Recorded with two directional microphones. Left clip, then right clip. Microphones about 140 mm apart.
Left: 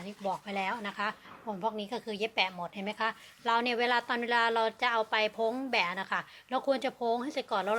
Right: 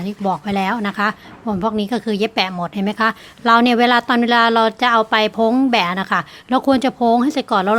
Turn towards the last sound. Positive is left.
turn(degrees=-25)  # may be behind; listen again after turning